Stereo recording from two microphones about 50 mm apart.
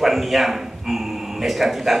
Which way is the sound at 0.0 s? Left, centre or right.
Centre.